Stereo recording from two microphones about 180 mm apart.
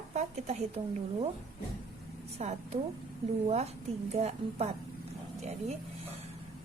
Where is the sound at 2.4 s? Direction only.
35° right (ahead or behind).